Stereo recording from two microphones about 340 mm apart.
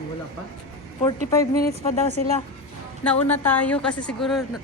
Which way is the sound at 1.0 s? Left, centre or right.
Centre.